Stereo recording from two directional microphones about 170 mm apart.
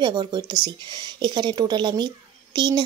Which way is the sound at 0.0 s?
25° right (ahead or behind).